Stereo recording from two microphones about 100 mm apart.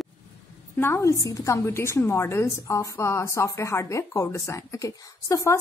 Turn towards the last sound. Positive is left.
turn(degrees=30)  # may be behind; listen again after turning